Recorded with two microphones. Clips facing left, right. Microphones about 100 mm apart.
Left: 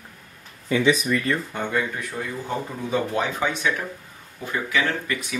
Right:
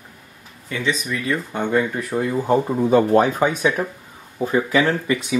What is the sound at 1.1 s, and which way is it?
Speech, 5° right (ahead or behind).